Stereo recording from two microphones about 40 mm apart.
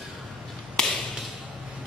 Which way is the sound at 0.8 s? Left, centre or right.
Centre.